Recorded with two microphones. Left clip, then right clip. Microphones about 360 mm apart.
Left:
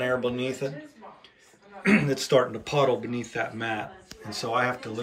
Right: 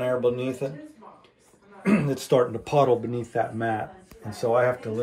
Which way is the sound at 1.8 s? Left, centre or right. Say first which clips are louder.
Left 1 dB; centre.